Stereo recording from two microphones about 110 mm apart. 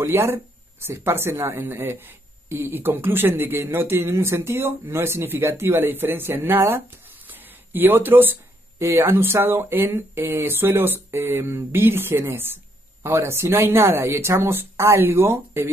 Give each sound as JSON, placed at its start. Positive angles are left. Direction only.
{"t": 0.0, "sound": "speech", "side_deg": -25}